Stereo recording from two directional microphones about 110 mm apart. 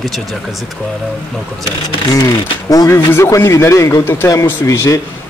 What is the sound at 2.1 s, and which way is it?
Speech, 35° left (ahead or behind).